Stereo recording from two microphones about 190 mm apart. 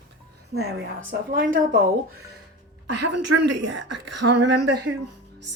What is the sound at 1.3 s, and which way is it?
Speech, 50° right (ahead or behind).